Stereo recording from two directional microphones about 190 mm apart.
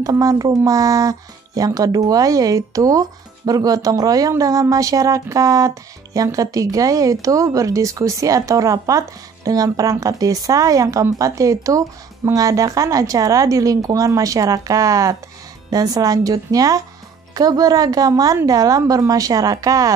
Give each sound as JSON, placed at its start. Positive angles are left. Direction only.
{"t": 0.0, "sound": "a woman's voice", "side_deg": -20}